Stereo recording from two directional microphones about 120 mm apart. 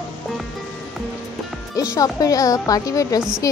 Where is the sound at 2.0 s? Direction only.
30° left (ahead or behind).